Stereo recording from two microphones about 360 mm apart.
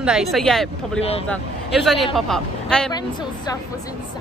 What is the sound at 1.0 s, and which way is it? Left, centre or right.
Speech, centre.